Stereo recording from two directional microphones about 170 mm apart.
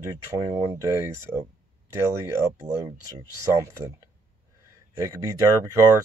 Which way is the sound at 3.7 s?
20° right (ahead or behind).